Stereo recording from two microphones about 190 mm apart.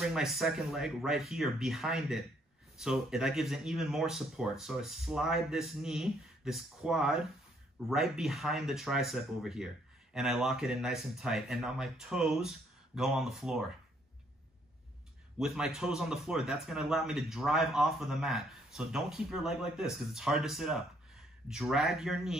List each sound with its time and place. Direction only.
0.0 s speech: centre (ahead or behind)
15.3 s speech: 5° right (ahead or behind)